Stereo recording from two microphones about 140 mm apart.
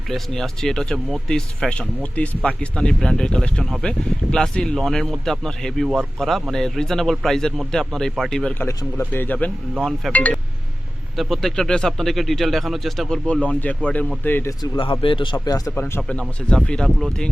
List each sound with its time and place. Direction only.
0.1 s speech: 5° left (ahead or behind)
8.5 s speech: 15° left (ahead or behind)
9.7 s speech: centre (ahead or behind)
10.1 s speech: 10° left (ahead or behind)
14.6 s speech: 40° left (ahead or behind)
15.7 s speech: 10° left (ahead or behind)